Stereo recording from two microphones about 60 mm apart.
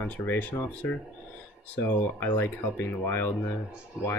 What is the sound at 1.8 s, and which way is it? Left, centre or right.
Speech, left.